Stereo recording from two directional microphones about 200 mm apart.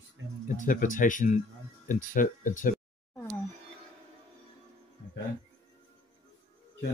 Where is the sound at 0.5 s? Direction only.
40° left (ahead or behind).